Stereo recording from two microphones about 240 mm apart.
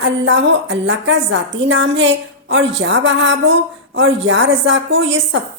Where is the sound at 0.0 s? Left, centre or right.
Right.